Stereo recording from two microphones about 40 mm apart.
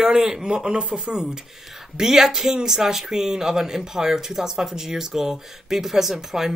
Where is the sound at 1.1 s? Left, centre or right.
Centre.